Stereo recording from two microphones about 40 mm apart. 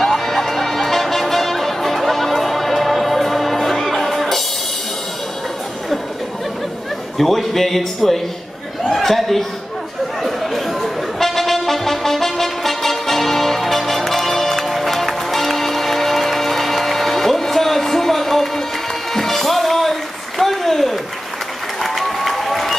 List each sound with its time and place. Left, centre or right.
0.0 s music: centre
7.2 s speech: centre
10.2 s music: centre
19.1 s a sound: centre
21.8 s run: centre